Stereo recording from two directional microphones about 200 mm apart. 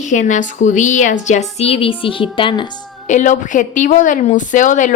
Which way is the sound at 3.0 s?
40° left (ahead or behind).